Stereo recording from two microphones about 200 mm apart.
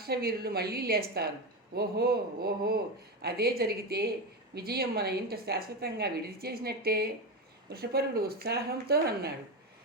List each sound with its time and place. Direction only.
0.0 s a woman's voice: 50° right (ahead or behind)